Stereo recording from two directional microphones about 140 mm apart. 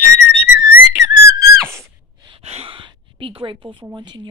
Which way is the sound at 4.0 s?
30° right (ahead or behind).